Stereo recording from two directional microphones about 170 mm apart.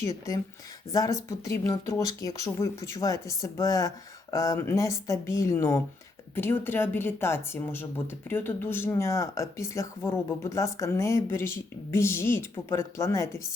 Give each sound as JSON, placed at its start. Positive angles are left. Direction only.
{"t": 0.0, "sound": "speech", "side_deg": 20}